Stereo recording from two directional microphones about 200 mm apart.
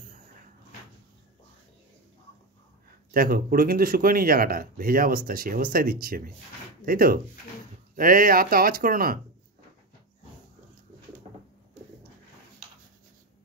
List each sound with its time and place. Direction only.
3.1 s speech: 45° right (ahead or behind)